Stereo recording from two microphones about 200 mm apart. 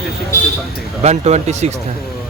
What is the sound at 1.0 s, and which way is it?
Speech, 35° right (ahead or behind).